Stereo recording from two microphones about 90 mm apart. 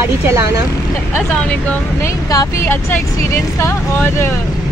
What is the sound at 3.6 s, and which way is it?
Speech, 30° left (ahead or behind).